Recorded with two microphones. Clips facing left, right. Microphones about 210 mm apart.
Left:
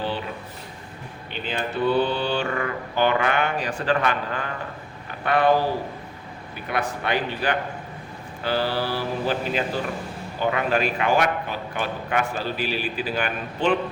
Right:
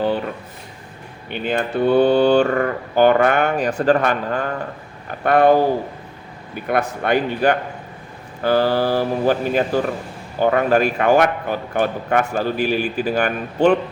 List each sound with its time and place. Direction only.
1.3 s a man's voice: 55° right (ahead or behind)
6.7 s a man's voice: 50° right (ahead or behind)